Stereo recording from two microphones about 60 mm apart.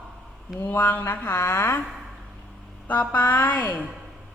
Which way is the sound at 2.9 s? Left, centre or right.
Left.